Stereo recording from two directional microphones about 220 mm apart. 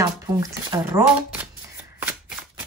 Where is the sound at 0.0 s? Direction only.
15° right (ahead or behind).